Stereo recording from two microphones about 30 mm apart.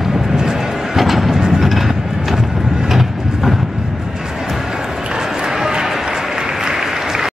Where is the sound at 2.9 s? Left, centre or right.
Centre.